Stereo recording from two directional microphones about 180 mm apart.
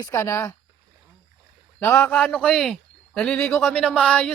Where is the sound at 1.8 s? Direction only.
10° left (ahead or behind).